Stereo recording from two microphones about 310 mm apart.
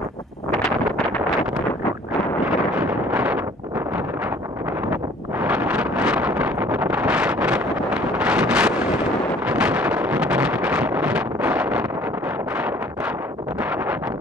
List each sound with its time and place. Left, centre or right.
0.7 s wind noise: centre
2.4 s wind noise: centre
5.4 s vehicle: centre
9.5 s wind noise: centre